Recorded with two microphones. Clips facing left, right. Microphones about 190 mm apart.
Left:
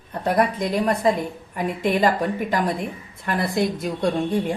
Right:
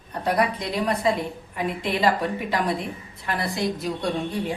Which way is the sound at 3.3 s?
50° left (ahead or behind).